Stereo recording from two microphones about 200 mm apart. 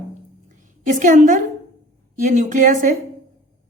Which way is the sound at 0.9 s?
40° right (ahead or behind).